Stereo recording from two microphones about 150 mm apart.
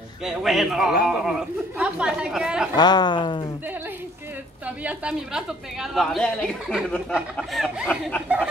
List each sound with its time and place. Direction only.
0.2 s a woman's voice: centre (ahead or behind)
2.7 s a woman's voice: 30° left (ahead or behind)
4.6 s a woman's voice: 10° right (ahead or behind); by 8.2 s 5° left (ahead or behind)